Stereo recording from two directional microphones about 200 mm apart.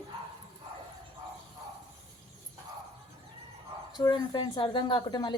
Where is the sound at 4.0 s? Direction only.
20° left (ahead or behind).